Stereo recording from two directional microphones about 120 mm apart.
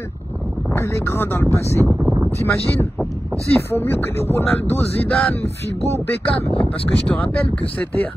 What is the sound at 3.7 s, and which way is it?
Speech, 20° left (ahead or behind).